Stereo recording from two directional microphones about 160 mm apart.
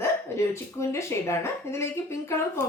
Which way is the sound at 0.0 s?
15° left (ahead or behind).